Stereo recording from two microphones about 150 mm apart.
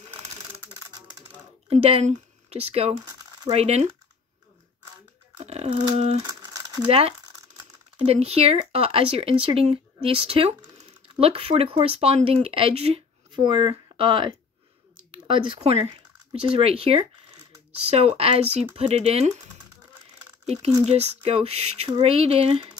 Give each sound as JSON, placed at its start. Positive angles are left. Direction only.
{"t": 0.7, "sound": "a sound", "side_deg": -25}
{"t": 1.7, "sound": "speech", "side_deg": -40}
{"t": 3.1, "sound": "a sound", "side_deg": -25}
{"t": 3.5, "sound": "speech", "side_deg": -45}
{"t": 5.4, "sound": "speech", "side_deg": -45}
{"t": 6.2, "sound": "crumpling", "side_deg": -25}
{"t": 6.9, "sound": "speech", "side_deg": -40}
{"t": 20.4, "sound": "speech", "side_deg": -45}